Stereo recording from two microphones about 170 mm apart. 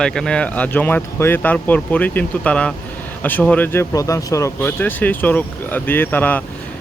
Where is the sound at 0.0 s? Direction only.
5° left (ahead or behind).